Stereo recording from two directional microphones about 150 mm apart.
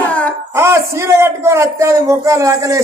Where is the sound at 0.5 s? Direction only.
15° right (ahead or behind).